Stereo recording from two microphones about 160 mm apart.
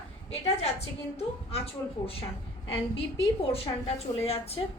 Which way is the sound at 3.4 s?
40° left (ahead or behind).